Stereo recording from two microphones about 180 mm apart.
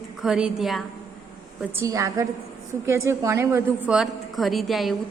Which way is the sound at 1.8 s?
20° right (ahead or behind).